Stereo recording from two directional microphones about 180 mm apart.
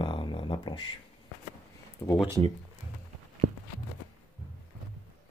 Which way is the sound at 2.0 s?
20° left (ahead or behind).